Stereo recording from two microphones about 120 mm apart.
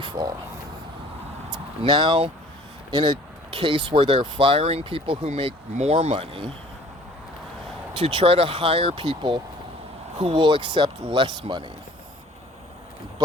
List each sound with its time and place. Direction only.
0.0 s a sound: 40° right (ahead or behind)
1.9 s speech: 40° right (ahead or behind)
5.2 s speech: 60° right (ahead or behind)
7.9 s speech: 45° right (ahead or behind)